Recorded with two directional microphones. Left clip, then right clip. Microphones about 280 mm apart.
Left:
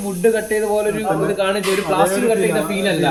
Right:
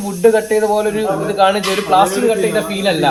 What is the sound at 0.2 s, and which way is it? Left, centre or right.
Speech, centre.